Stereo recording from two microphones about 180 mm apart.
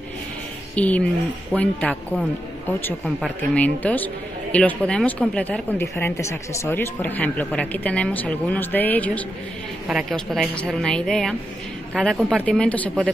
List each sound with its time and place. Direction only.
0.7 s a man's voice: 10° left (ahead or behind)